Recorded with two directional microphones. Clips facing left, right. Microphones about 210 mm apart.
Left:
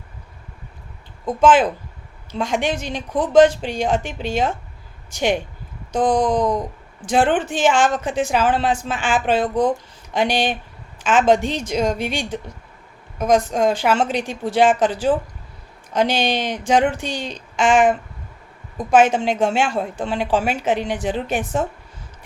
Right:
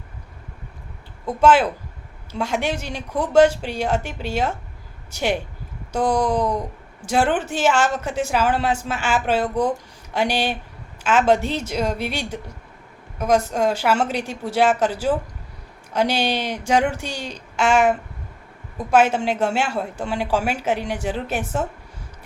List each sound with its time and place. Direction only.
2.4 s speech: 10° right (ahead or behind)
5.9 s a sound: 10° right (ahead or behind)
7.0 s speech: 10° right (ahead or behind)
19.0 s speech: 10° right (ahead or behind)